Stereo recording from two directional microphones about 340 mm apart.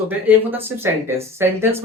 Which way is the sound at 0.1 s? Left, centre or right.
Centre.